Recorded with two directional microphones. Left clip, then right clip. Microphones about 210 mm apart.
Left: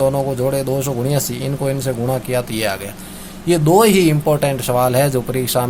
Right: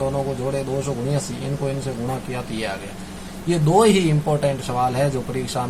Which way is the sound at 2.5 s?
50° left (ahead or behind).